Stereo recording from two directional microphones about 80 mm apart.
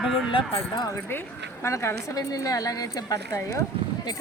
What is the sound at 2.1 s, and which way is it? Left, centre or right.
A woman's voice, left.